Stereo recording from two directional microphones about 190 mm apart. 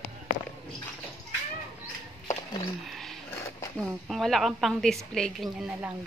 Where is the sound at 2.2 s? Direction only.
25° left (ahead or behind).